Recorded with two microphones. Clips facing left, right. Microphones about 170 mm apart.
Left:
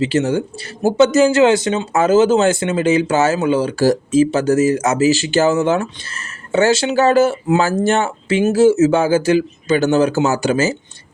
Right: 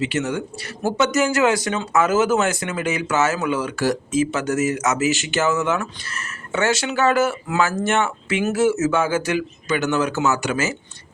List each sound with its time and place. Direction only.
0.0 s speech: 30° left (ahead or behind)